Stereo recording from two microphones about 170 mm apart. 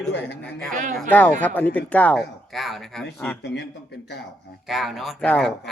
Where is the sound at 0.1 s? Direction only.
85° left.